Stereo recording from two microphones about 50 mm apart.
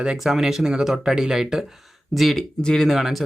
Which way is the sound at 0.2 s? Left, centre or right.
Centre.